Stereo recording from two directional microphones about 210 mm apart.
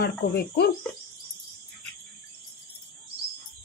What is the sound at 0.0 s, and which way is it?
Speech, 50° left (ahead or behind).